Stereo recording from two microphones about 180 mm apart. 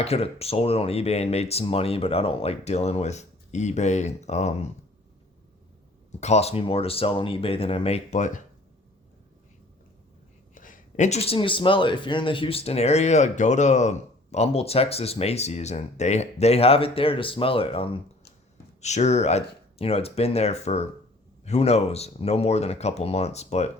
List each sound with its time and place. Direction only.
0.0 s speech: 35° left (ahead or behind)
6.1 s speech: 40° left (ahead or behind)
10.5 s speech: 45° left (ahead or behind)